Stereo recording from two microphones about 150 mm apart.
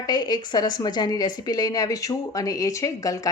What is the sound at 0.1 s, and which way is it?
A woman's voice, 25° left (ahead or behind).